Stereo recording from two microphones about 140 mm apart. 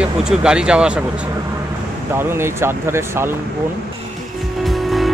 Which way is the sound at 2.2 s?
15° right (ahead or behind).